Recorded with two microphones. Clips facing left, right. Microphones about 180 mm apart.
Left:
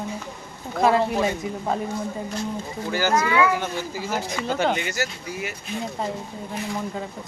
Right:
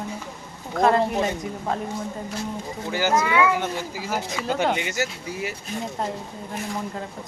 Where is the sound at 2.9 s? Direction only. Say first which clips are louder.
Even; 20° right (ahead or behind).